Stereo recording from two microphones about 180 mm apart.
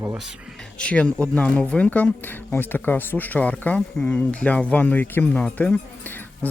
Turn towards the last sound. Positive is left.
turn(degrees=10)  # may be behind; listen again after turning